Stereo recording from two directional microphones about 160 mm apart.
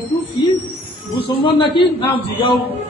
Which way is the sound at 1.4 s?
30° left (ahead or behind).